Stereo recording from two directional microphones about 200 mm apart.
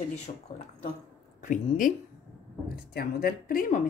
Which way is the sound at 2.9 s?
50° left (ahead or behind).